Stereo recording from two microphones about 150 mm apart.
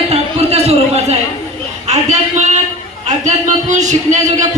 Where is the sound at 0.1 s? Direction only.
45° right (ahead or behind).